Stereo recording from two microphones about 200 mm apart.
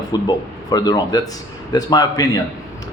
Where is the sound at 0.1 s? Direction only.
20° left (ahead or behind).